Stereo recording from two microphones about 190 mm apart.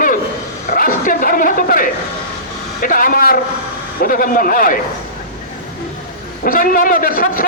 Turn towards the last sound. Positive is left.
turn(degrees=50)  # may be behind; listen again after turning